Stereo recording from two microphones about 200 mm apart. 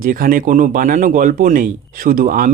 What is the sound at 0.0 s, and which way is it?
Speech, 45° right (ahead or behind).